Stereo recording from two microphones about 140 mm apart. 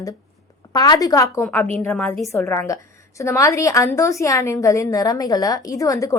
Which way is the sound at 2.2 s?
20° left (ahead or behind).